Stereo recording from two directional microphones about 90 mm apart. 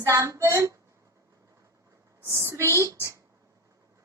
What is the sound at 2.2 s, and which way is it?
Speech, 30° right (ahead or behind).